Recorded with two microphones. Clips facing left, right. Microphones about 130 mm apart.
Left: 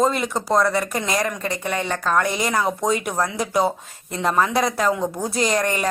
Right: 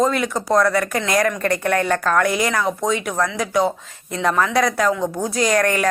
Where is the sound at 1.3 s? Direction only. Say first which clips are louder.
Right 6 dB; 5° left (ahead or behind).